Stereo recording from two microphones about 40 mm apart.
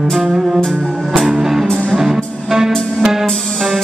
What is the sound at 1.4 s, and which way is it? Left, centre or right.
Music, centre.